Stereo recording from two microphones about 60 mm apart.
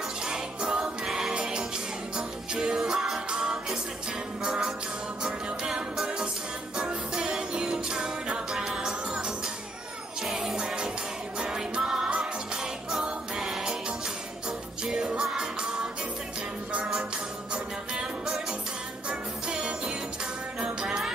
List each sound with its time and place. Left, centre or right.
0.2 s music: centre
17.9 s music: centre